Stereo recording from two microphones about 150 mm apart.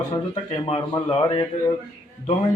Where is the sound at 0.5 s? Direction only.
30° left (ahead or behind).